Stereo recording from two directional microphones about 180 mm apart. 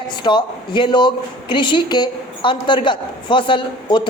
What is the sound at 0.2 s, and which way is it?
A woman's voice, 25° left (ahead or behind).